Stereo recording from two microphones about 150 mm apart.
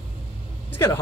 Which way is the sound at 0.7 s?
15° left (ahead or behind).